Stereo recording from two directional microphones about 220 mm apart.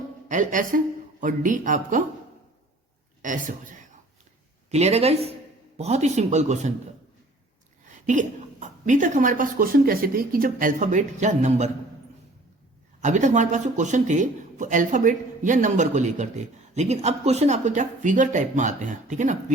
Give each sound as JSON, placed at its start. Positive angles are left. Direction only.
{"t": 0.3, "sound": "a man's voice", "side_deg": -35}
{"t": 3.2, "sound": "a woman's voice", "side_deg": -35}
{"t": 8.0, "sound": "a man's voice", "side_deg": -35}
{"t": 13.0, "sound": "a man's voice", "side_deg": -35}